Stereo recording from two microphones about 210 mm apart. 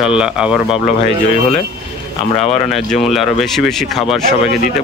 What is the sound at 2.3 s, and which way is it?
Speech, 30° left (ahead or behind).